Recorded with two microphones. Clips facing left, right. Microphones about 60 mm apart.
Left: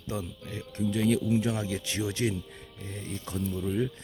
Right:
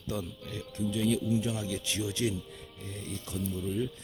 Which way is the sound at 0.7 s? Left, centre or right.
Left.